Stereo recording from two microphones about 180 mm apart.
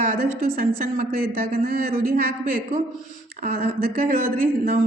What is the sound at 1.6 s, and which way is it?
Speech, 55° right (ahead or behind).